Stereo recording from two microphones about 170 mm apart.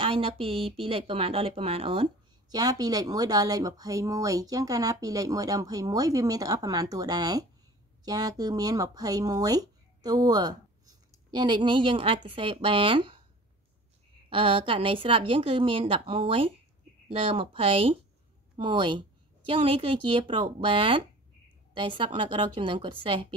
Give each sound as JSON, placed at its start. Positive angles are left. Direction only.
{"t": 0.0, "sound": "a woman's voice", "side_deg": -30}
{"t": 2.5, "sound": "speech", "side_deg": -20}
{"t": 14.3, "sound": "a woman's voice", "side_deg": -30}